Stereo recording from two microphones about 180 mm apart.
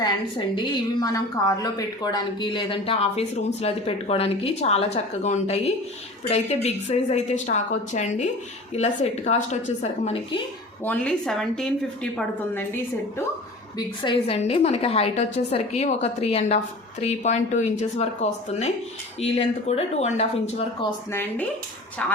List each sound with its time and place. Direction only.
0.0 s a woman's voice: 25° left (ahead or behind)
10.8 s a woman's voice: 5° left (ahead or behind)
13.7 s speech: 30° left (ahead or behind)
21.1 s a woman's voice: 10° left (ahead or behind)